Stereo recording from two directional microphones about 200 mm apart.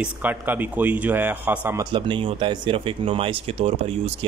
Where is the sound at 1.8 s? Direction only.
25° right (ahead or behind).